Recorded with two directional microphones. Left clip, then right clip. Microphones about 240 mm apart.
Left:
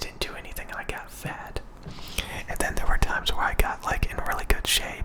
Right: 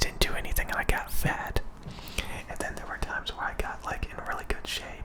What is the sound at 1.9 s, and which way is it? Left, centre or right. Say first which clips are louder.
Whispering: left 4 dB; centre.